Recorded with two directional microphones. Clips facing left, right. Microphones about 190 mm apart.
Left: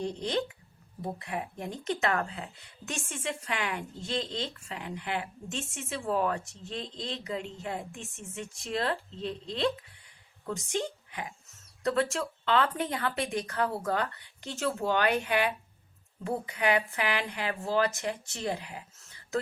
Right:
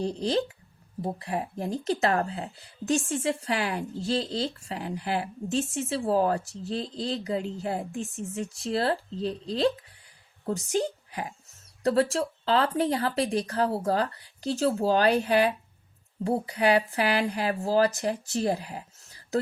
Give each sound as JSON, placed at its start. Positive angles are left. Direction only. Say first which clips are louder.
{"t": 0.0, "sound": "speech", "louder": "right 4 dB", "side_deg": -35}